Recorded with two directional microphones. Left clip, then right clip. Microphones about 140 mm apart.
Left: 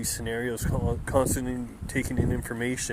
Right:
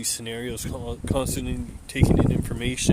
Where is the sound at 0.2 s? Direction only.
20° right (ahead or behind).